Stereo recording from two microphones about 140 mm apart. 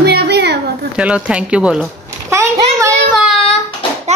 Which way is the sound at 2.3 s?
20° right (ahead or behind).